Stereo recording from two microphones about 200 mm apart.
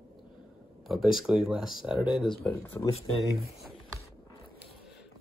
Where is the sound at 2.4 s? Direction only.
10° left (ahead or behind).